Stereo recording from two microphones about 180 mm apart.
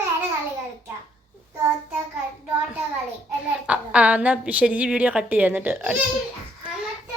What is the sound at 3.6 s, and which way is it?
A woman's voice, 5° right (ahead or behind).